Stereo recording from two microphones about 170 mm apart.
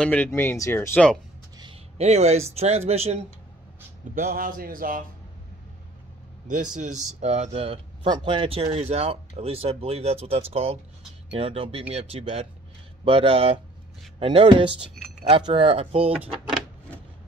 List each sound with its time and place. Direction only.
0.0 s speech: 10° left (ahead or behind)
1.6 s a sound: 35° right (ahead or behind)
2.5 s speech: 40° right (ahead or behind)
4.1 s a man's voice: 55° right (ahead or behind)
6.4 s speech: 45° right (ahead or behind)